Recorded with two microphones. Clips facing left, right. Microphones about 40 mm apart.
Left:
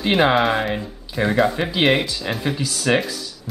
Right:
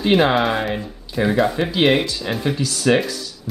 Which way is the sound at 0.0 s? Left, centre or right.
Centre.